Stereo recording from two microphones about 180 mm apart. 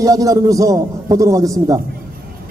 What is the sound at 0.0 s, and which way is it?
A man's voice, 20° right (ahead or behind).